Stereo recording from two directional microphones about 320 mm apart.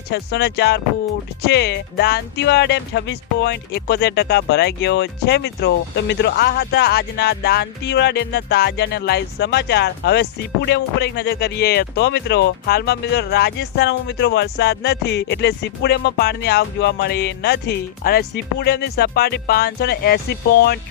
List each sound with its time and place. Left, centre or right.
0.1 s speech: left